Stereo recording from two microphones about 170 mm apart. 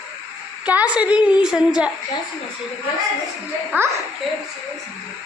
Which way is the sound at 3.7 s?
10° right (ahead or behind).